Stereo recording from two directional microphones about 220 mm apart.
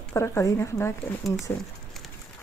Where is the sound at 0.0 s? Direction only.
10° left (ahead or behind).